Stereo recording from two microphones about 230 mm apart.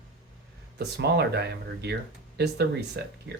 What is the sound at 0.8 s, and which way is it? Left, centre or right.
Speech, right.